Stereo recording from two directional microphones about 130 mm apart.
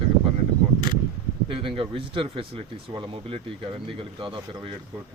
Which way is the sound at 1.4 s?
40° right (ahead or behind).